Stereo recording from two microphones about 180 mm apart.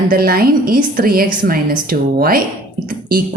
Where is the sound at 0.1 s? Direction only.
55° right (ahead or behind).